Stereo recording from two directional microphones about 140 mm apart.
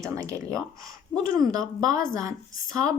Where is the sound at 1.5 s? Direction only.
25° right (ahead or behind).